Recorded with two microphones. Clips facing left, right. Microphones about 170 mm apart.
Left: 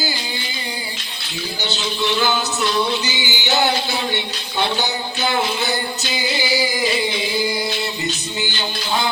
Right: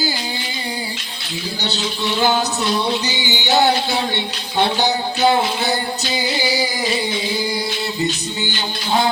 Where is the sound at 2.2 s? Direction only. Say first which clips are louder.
Right 2 dB; 35° right (ahead or behind).